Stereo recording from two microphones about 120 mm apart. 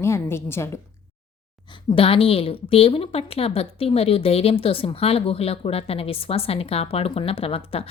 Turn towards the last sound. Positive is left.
turn(degrees=55)  # may be behind; listen again after turning